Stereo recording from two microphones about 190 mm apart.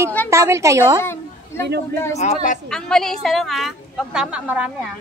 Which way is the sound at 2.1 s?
40° left (ahead or behind).